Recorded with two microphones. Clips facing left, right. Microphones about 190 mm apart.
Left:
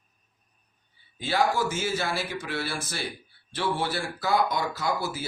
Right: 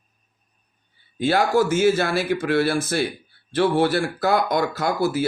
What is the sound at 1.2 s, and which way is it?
Speech, 65° right (ahead or behind).